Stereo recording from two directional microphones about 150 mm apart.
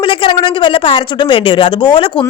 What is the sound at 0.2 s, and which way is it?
Speech, 35° left (ahead or behind).